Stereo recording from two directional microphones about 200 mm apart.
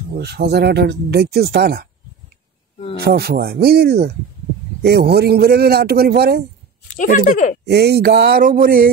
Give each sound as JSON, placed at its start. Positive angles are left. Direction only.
{"t": 0.2, "sound": "speech", "side_deg": -55}
{"t": 3.0, "sound": "a man's voice", "side_deg": -50}
{"t": 7.0, "sound": "speech", "side_deg": 40}
{"t": 7.6, "sound": "a man's voice", "side_deg": -55}